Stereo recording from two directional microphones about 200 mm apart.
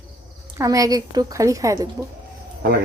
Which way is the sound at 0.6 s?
15° right (ahead or behind).